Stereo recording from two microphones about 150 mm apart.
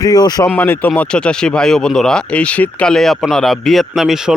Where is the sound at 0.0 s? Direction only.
25° left (ahead or behind).